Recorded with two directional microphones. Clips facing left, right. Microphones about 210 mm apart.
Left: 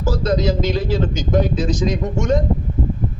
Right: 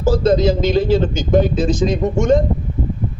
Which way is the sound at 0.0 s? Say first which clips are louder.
Right 5 dB; 30° right (ahead or behind).